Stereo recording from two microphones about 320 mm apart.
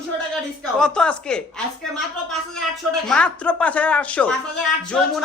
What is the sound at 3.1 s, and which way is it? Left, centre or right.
A man's voice, centre.